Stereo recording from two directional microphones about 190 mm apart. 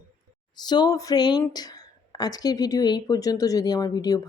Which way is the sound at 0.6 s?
20° left (ahead or behind).